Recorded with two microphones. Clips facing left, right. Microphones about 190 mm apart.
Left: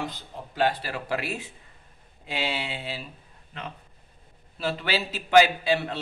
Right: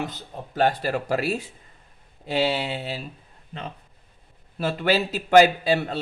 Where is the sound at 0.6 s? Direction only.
45° right (ahead or behind).